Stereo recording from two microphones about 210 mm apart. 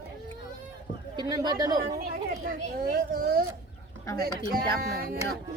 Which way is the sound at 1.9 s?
45° right (ahead or behind).